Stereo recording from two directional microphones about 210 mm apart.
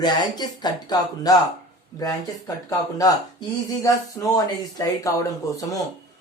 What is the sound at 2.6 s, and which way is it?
Speech, 15° left (ahead or behind).